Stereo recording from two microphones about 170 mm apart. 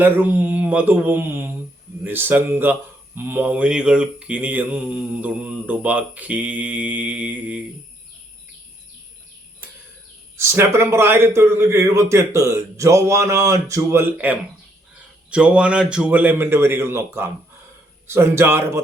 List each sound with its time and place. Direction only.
0.0 s mantra: 10° right (ahead or behind)
10.3 s mantra: 15° right (ahead or behind)